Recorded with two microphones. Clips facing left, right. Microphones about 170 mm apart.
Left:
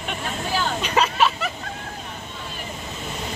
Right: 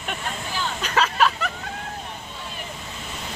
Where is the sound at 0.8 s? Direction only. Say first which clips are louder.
Right 1 dB; 10° left (ahead or behind).